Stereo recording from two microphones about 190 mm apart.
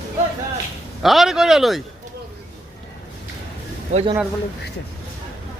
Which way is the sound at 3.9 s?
35° right (ahead or behind).